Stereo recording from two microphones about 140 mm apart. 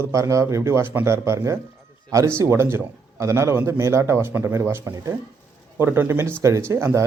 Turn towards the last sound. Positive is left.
turn(degrees=-20)  # may be behind; listen again after turning